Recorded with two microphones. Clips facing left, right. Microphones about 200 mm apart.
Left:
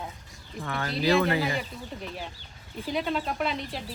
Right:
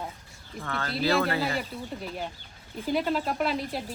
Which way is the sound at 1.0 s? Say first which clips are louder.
Left 2 dB; 15° left (ahead or behind).